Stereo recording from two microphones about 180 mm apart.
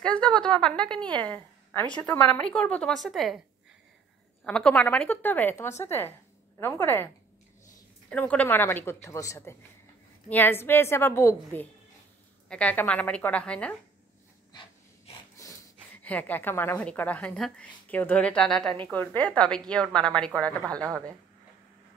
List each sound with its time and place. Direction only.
0.0 s a woman's voice: 5° left (ahead or behind)
4.5 s a woman's voice: 5° left (ahead or behind)
8.1 s a woman's voice: 10° left (ahead or behind)
15.4 s a sound: 15° left (ahead or behind)
16.0 s a woman's voice: 10° left (ahead or behind)